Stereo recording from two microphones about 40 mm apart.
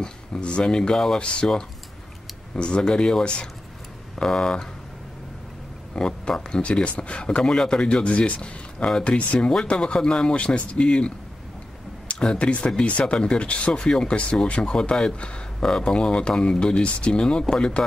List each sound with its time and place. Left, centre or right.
0.0 s speech: left
0.9 s speech: centre
1.2 s speech: left
2.5 s speech: left
5.9 s speech: centre
10.3 s speech: left
12.2 s speech: left
14.8 s speech: centre